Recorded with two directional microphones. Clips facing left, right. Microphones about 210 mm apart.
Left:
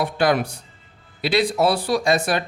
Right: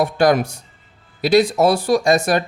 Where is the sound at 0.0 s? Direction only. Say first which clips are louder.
Right 4 dB; 45° right (ahead or behind).